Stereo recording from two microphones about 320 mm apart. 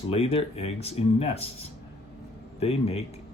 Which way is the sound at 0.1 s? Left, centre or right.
Centre.